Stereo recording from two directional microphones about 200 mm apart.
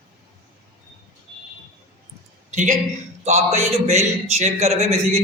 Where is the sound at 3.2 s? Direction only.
35° right (ahead or behind).